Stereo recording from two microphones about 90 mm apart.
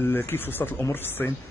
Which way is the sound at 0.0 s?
25° left (ahead or behind).